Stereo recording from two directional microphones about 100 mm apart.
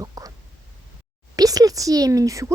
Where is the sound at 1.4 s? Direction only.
35° right (ahead or behind).